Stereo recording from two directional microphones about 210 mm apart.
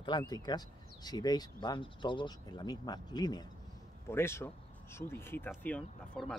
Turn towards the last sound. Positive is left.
turn(degrees=5)  # may be behind; listen again after turning